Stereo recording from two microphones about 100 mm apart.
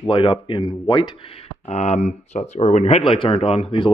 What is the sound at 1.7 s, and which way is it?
Speech, 90° left.